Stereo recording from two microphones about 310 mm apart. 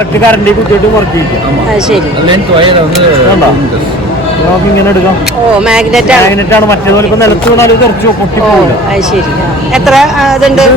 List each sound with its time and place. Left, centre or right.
2.2 s speech: centre
5.5 s speech: centre
9.7 s speech: centre